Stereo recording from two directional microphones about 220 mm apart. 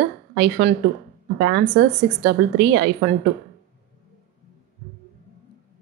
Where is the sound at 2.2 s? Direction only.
50° right (ahead or behind).